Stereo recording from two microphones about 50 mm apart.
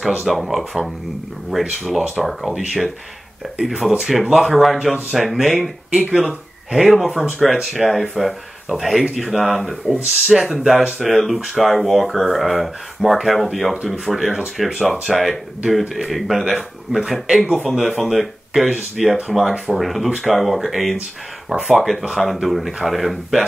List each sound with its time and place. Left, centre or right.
0.2 s speech: centre
5.9 s speech: right
6.2 s speech: centre
18.7 s speech: centre